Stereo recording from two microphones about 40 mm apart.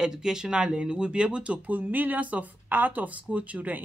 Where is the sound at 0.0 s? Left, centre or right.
Centre.